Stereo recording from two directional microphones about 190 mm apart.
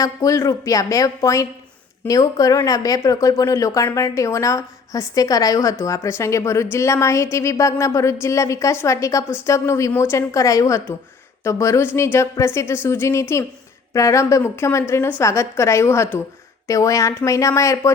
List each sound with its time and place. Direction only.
0.0 s speech: 15° left (ahead or behind)